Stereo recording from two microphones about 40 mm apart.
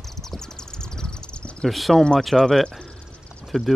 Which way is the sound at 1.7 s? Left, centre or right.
Centre.